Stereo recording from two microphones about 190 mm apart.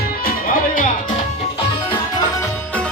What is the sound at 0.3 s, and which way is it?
Music, 45° left (ahead or behind).